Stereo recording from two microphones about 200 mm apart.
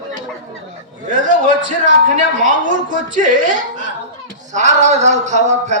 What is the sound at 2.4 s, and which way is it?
A man's voice, 40° right (ahead or behind).